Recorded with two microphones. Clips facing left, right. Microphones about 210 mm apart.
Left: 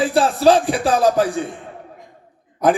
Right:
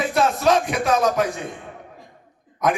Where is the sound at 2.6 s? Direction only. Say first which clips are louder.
Left 5 dB; 30° left (ahead or behind).